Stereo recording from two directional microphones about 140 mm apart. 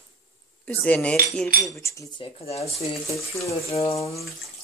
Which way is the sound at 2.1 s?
40° left (ahead or behind).